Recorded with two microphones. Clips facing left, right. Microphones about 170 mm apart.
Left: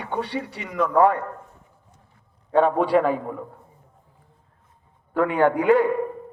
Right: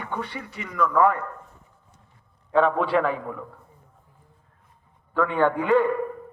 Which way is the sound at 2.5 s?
40° left (ahead or behind).